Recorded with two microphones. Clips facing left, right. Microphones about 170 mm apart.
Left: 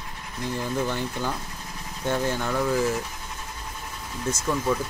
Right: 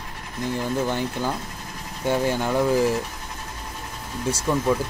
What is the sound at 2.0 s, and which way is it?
Speech, 10° right (ahead or behind).